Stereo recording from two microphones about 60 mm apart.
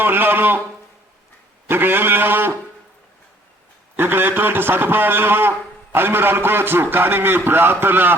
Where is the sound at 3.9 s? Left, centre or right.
Right.